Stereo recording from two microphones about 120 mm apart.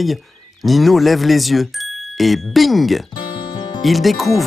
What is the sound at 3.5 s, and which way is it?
Music, 35° left (ahead or behind).